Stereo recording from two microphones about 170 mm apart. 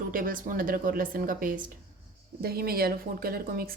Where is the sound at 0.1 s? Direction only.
55° right (ahead or behind).